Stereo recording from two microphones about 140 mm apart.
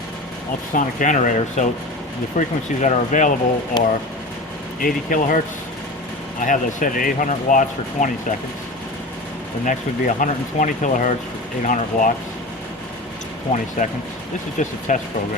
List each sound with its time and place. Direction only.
0.7 s speech: 70° left (ahead or behind)
3.7 s speech: 30° left (ahead or behind)
4.8 s speech: 80° left
6.4 s speech: 70° left (ahead or behind)
9.6 s speech: 65° left (ahead or behind)
14.6 s speech: 65° left (ahead or behind)